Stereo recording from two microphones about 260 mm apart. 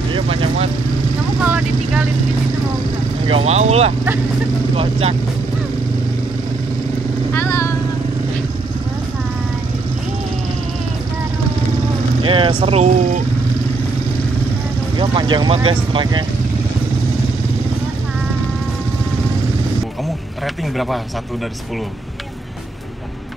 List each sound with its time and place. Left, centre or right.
0.1 s speech: right
1.4 s vehicle: centre
3.3 s speech: right
7.3 s speech: centre
12.2 s speech: centre
15.0 s speech: centre
20.7 s speech: centre